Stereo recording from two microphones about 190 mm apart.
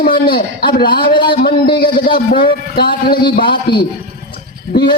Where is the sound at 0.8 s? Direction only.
25° left (ahead or behind).